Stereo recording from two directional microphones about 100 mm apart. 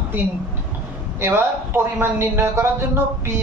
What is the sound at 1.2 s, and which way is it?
Speech, 25° right (ahead or behind).